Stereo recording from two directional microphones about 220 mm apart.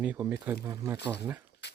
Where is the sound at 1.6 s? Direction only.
50° left (ahead or behind).